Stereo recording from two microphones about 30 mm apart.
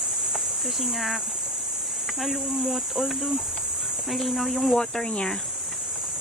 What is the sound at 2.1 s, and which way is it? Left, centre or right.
Speech, centre.